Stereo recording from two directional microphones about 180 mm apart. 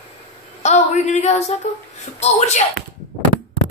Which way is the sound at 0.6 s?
40° left (ahead or behind).